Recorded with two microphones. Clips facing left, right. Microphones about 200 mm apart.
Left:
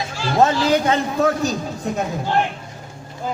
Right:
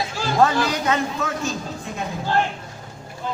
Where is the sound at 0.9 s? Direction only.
35° left (ahead or behind).